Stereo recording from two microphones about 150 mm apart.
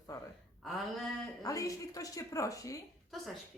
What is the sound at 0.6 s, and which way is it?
Speech, centre (ahead or behind).